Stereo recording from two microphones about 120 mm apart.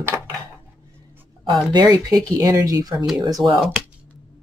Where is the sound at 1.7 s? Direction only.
35° right (ahead or behind).